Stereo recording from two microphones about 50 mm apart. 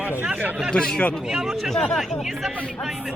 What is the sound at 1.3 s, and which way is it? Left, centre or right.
Speech, centre.